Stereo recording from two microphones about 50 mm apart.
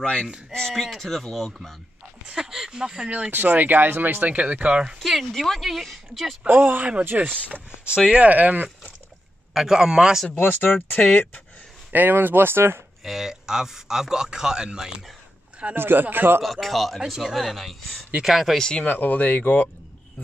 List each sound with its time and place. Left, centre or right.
0.0 s speech: centre
2.2 s a man's voice: centre
3.3 s speech: right
4.3 s speech: right
5.0 s speech: centre
6.4 s speech: right
9.5 s a man's voice: centre
10.3 s speech: left
11.9 s speech: right
13.0 s a man's voice: centre
15.7 s speech: right
16.4 s speech: centre
18.6 s speech: centre
18.9 s speech: left